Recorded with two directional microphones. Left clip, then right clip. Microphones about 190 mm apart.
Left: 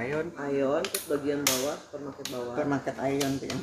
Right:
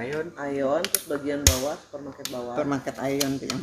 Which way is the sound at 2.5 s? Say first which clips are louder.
Right 2 dB; 40° right (ahead or behind).